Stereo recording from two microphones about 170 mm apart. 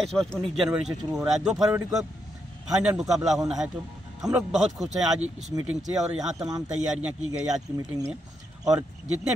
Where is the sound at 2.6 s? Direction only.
5° right (ahead or behind).